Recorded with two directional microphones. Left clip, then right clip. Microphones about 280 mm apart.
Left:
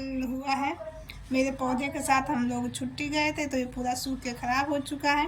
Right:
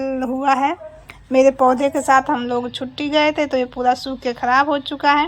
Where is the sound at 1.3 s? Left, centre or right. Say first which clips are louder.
Right 15 dB; centre.